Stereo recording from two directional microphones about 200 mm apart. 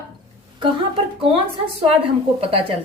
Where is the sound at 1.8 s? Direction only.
30° right (ahead or behind).